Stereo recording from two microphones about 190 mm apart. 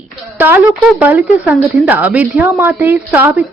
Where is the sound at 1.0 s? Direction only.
10° right (ahead or behind).